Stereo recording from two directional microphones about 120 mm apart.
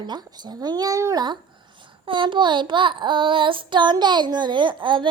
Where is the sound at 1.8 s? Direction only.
45° right (ahead or behind).